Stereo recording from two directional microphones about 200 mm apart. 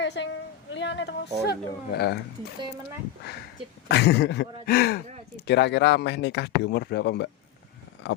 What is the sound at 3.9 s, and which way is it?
Speech, 55° left (ahead or behind).